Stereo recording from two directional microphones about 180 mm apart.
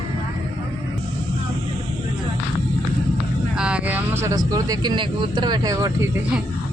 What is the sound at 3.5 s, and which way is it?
Speech, 5° right (ahead or behind).